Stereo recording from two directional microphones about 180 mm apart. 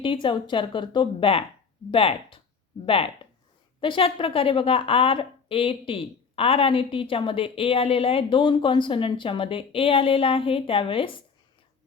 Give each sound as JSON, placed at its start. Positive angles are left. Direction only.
{"t": 0.0, "sound": "speech", "side_deg": 30}